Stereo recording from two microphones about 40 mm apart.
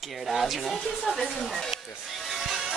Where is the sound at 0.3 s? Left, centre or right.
Centre.